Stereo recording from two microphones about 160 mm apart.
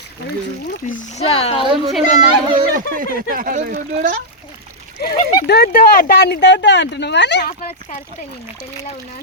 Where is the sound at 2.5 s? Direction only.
60° right (ahead or behind); by 3.8 s 75° right (ahead or behind).